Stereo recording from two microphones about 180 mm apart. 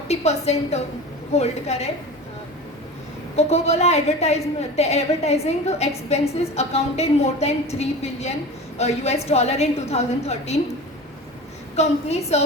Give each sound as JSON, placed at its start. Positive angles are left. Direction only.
{"t": 0.1, "sound": "a woman's voice", "side_deg": 35}
{"t": 3.3, "sound": "a woman's voice", "side_deg": 35}
{"t": 11.8, "sound": "a woman's voice", "side_deg": 35}